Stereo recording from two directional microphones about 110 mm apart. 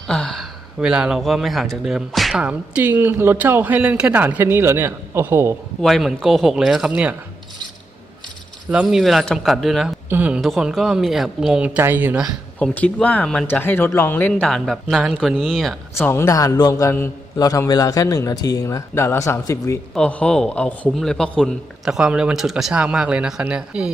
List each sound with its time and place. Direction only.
0.1 s a sound: 5° left (ahead or behind)
0.8 s speech: 5° right (ahead or behind); by 5.5 s 20° right (ahead or behind)
5.8 s speech: centre (ahead or behind)
8.7 s speech: 5° right (ahead or behind)
10.1 s speech: 15° right (ahead or behind)
10.4 s speech: 5° right (ahead or behind)
12.5 s a man's voice: 15° left (ahead or behind)
14.4 s speech: 5° left (ahead or behind)
16.0 s a man's voice: 25° left (ahead or behind)
19.9 s a man's voice: 10° left (ahead or behind)
21.8 s speech: 5° right (ahead or behind)